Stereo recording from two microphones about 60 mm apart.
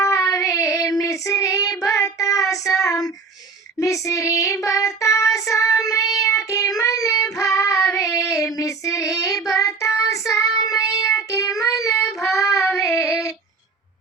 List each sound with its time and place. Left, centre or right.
0.0 s child singing: left
12.3 s child singing: left